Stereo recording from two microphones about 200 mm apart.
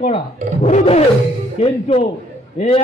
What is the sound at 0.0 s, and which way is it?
A man's voice, 35° left (ahead or behind).